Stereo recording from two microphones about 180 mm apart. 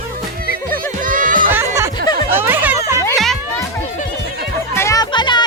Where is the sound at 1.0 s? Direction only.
50° right (ahead or behind).